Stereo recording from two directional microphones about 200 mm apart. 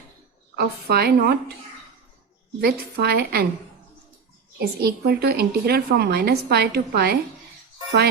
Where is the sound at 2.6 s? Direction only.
55° right (ahead or behind).